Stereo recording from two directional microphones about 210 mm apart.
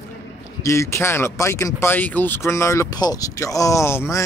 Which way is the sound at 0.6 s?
15° left (ahead or behind).